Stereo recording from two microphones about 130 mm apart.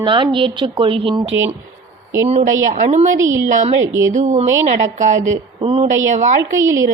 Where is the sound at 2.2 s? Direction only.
65° right (ahead or behind).